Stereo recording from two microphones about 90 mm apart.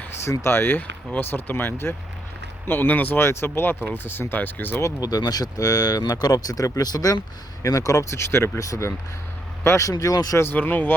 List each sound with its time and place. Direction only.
0.3 s speech: 25° left (ahead or behind)
4.9 s speech: 45° left (ahead or behind)
10.3 s speech: 25° left (ahead or behind)